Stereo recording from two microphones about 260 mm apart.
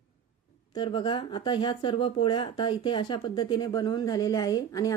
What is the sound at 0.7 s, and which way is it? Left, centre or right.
Speech, centre.